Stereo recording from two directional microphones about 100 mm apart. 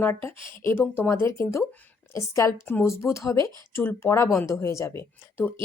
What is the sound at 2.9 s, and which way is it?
Speech, 30° left (ahead or behind).